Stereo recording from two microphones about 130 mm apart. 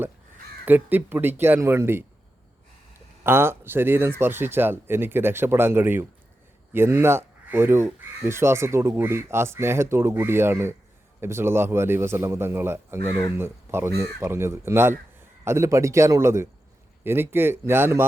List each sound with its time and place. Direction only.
0.6 s speech: 15° right (ahead or behind)
3.2 s speech: 20° right (ahead or behind)